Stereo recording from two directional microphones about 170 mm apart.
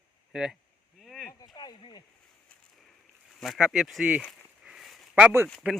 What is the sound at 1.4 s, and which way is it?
Speech, 25° left (ahead or behind).